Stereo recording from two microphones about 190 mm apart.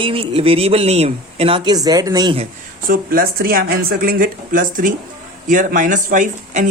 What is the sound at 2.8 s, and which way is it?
Speech, 50° right (ahead or behind).